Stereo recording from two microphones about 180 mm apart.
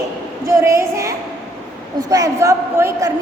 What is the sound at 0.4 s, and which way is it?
A woman's voice, 15° right (ahead or behind).